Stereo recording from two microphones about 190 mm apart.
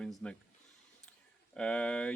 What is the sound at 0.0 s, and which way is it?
Speech, 5° left (ahead or behind).